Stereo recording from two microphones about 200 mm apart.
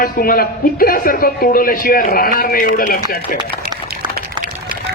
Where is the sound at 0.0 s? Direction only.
45° left (ahead or behind).